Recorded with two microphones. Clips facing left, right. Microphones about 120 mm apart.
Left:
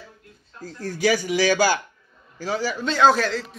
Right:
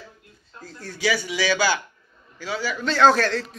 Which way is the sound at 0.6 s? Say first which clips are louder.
Left 6 dB; 40° left (ahead or behind).